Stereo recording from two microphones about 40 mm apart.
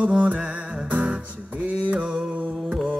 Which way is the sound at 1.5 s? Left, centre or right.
Right.